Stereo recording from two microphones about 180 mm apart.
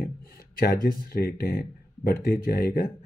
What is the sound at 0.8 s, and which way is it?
Speech, 55° left (ahead or behind).